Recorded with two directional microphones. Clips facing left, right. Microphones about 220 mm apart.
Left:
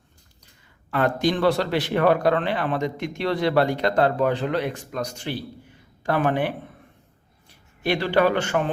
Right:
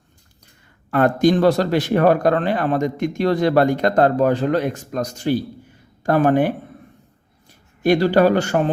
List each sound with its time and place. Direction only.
0.9 s a man's voice: 50° right (ahead or behind)
7.8 s a man's voice: 45° right (ahead or behind)